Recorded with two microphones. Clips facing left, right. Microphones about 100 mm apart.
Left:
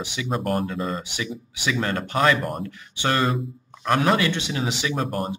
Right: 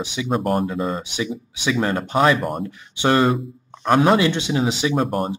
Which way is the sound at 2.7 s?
20° right (ahead or behind).